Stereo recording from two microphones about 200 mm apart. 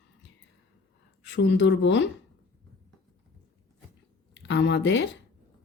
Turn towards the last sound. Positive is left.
turn(degrees=65)  # may be behind; listen again after turning